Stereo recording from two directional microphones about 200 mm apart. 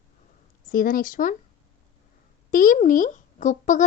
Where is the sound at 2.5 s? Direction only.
45° left (ahead or behind).